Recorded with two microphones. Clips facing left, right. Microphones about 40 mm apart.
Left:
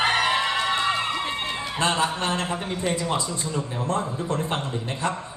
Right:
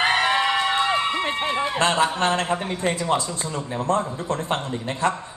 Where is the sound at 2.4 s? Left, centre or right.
Centre.